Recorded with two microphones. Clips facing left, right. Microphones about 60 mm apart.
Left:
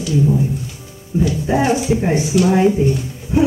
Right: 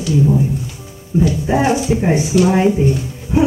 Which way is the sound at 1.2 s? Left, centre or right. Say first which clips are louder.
Right 1 dB; centre.